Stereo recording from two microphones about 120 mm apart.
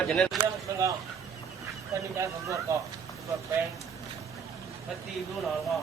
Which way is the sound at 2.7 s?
25° right (ahead or behind).